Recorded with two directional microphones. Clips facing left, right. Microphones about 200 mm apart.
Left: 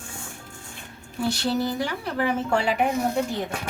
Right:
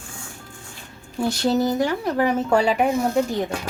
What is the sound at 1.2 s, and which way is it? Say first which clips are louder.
Speech: right 4 dB; 45° right (ahead or behind).